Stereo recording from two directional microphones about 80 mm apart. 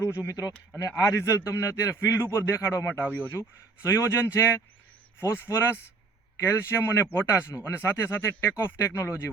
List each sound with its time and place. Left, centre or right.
0.1 s speech: left